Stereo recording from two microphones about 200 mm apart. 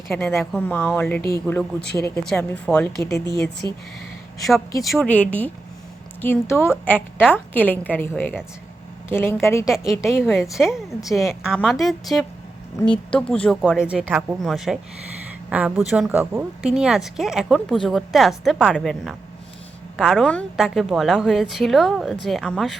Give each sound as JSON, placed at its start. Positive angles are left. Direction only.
{"t": 0.2, "sound": "a woman's voice", "side_deg": 10}
{"t": 1.8, "sound": "speech", "side_deg": 55}
{"t": 2.3, "sound": "a woman's voice", "side_deg": 5}
{"t": 4.4, "sound": "a woman's voice", "side_deg": 0}
{"t": 9.6, "sound": "speech", "side_deg": 0}